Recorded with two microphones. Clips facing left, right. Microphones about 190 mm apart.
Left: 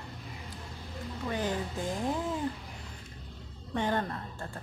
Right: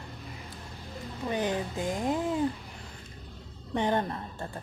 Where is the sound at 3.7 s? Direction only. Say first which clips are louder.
Right 3 dB; 20° right (ahead or behind).